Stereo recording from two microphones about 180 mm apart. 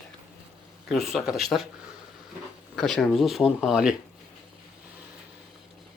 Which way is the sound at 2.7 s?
Centre (ahead or behind).